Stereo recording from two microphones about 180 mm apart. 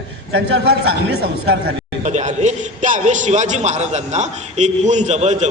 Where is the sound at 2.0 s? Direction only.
40° right (ahead or behind).